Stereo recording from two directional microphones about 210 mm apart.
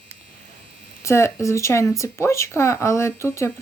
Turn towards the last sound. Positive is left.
turn(degrees=15)  # may be behind; listen again after turning